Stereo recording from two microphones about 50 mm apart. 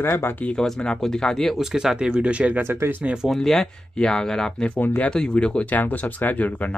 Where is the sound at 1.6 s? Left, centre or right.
Centre; by 2.6 s right.